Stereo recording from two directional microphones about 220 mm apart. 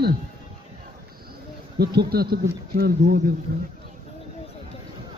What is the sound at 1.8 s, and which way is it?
Speech, 45° right (ahead or behind).